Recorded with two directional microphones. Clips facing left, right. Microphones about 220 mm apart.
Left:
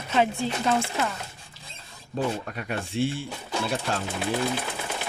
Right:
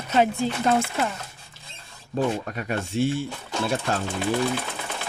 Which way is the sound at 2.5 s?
45° right (ahead or behind).